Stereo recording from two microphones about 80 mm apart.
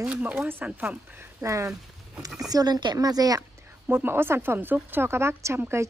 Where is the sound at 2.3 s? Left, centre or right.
Right.